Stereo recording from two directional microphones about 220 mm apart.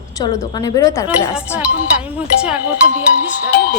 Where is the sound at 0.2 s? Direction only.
15° left (ahead or behind).